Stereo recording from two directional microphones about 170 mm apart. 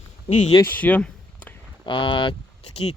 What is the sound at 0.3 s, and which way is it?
Speech, 45° left (ahead or behind).